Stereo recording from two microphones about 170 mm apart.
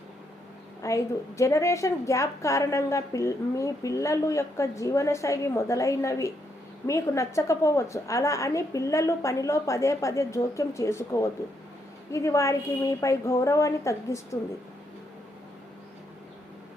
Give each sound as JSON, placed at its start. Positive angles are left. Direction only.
{"t": 0.8, "sound": "a woman's voice", "side_deg": 15}